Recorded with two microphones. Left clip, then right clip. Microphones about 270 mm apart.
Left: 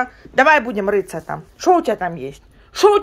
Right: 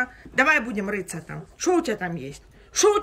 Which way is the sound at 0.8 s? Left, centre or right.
Left.